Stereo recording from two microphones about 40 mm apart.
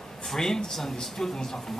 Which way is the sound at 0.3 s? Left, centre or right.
Centre.